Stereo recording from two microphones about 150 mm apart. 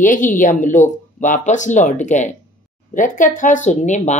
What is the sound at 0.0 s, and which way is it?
Speech, 60° left (ahead or behind).